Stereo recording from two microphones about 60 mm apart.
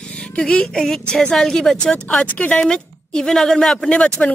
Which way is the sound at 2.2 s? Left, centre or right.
Left.